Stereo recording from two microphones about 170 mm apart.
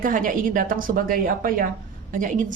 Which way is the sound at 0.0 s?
50° right (ahead or behind).